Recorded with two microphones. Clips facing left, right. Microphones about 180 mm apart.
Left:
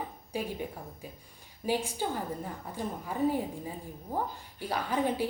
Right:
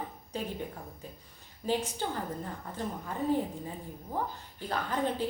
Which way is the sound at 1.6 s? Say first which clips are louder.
Even; 15° left (ahead or behind).